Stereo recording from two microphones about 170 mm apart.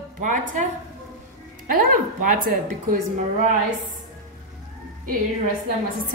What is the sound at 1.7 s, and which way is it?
A woman's voice, 55° right (ahead or behind).